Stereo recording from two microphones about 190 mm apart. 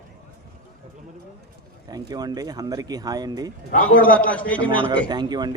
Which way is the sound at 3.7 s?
50° left (ahead or behind).